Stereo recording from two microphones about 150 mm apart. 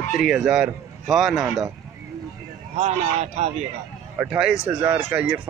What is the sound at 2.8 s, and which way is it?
Speech, 50° right (ahead or behind).